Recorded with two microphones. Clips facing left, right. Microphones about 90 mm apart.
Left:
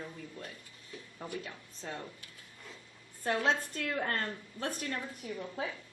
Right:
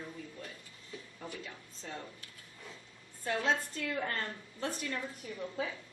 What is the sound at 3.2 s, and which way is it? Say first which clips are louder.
Speech: left 2 dB; 55° left (ahead or behind).